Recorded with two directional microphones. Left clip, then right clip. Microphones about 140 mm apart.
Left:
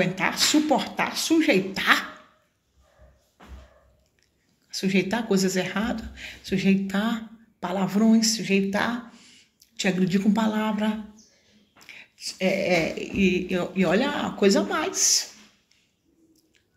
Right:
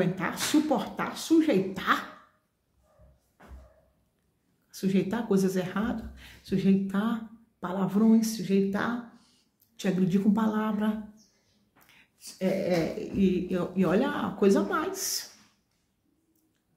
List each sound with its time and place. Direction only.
0.0 s speech: 20° right (ahead or behind)
4.6 s speech: 25° right (ahead or behind)